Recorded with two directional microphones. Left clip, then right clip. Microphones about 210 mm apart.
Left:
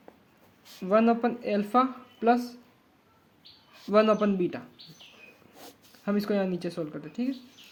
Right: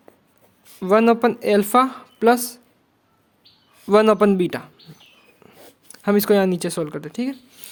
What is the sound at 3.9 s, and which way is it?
Speech, 55° right (ahead or behind).